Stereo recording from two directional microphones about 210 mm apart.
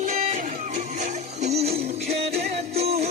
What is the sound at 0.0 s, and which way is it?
Music, 40° right (ahead or behind).